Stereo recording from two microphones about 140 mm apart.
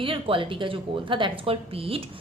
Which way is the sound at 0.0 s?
40° right (ahead or behind).